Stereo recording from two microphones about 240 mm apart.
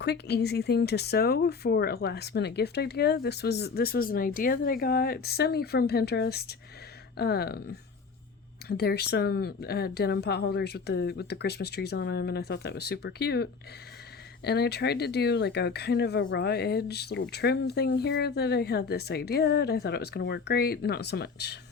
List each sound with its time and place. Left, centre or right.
0.0 s speech: left